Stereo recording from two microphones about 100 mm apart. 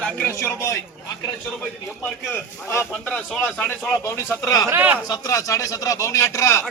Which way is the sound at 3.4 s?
20° left (ahead or behind).